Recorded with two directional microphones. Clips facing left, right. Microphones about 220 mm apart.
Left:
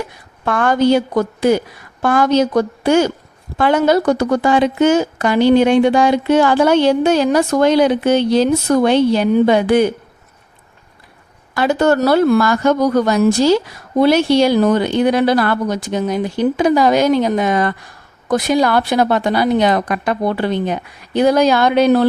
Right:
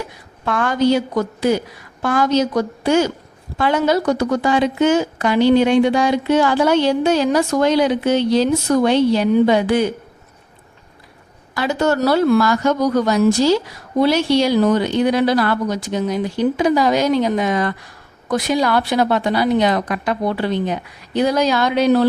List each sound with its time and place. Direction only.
0.4 s a woman's voice: 50° left (ahead or behind)
11.5 s a woman's voice: 55° left (ahead or behind)